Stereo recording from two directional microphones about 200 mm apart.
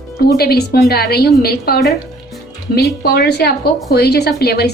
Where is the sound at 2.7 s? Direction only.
50° left (ahead or behind).